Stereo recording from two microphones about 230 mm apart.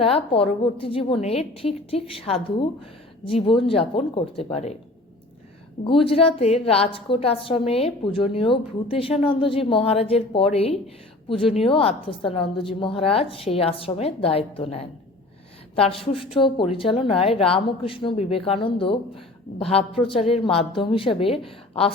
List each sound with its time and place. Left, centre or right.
0.0 s a woman's voice: left
5.8 s a woman's voice: left